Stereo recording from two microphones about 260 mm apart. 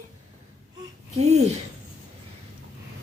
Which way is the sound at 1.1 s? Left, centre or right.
Right.